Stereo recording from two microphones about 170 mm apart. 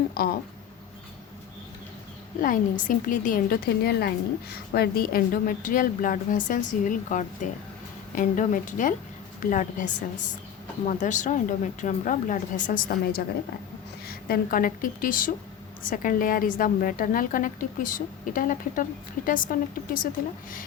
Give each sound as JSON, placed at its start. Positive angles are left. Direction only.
{"t": 0.1, "sound": "speech", "side_deg": 65}
{"t": 2.4, "sound": "a woman's voice", "side_deg": 50}